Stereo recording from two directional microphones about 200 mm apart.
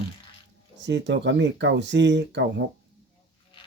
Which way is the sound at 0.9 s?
60° right (ahead or behind).